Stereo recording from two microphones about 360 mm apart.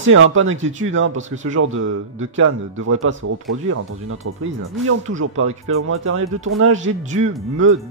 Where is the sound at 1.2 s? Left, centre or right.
Centre.